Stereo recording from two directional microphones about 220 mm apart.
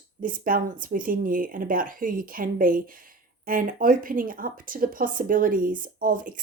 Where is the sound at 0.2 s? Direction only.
40° right (ahead or behind).